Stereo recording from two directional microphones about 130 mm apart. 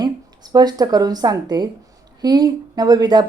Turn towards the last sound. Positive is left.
turn(degrees=-30)  # may be behind; listen again after turning